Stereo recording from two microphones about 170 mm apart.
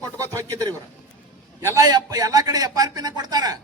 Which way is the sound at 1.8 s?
20° right (ahead or behind).